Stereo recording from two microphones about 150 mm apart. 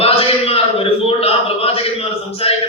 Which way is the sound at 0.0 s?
40° left (ahead or behind).